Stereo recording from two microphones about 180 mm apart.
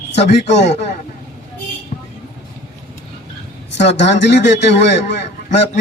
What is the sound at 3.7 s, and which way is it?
A man's voice, 75° left (ahead or behind).